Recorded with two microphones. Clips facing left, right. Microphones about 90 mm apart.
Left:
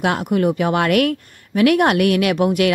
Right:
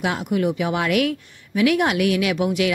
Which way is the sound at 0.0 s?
55° left (ahead or behind).